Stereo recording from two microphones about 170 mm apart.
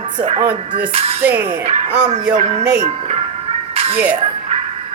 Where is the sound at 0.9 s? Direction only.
35° right (ahead or behind).